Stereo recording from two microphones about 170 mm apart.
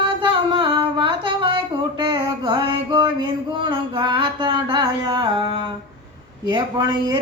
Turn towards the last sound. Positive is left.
turn(degrees=-25)  # may be behind; listen again after turning